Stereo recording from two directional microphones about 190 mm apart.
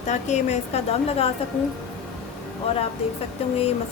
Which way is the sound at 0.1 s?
35° left (ahead or behind).